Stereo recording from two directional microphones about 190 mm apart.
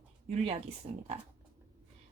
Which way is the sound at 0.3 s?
35° right (ahead or behind).